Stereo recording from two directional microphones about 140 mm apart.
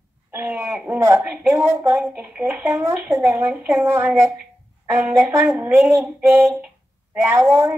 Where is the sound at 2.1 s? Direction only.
5° right (ahead or behind).